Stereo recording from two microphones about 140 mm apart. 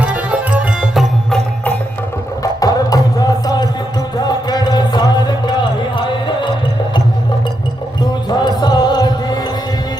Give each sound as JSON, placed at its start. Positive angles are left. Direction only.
{"t": 0.0, "sound": "music", "side_deg": -10}
{"t": 1.3, "sound": "music", "side_deg": 10}
{"t": 2.4, "sound": "music", "side_deg": 25}
{"t": 4.2, "sound": "a sound", "side_deg": 30}
{"t": 8.3, "sound": "music", "side_deg": 30}